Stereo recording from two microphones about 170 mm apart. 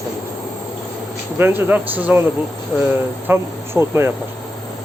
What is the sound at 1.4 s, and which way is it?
Speech, 10° right (ahead or behind).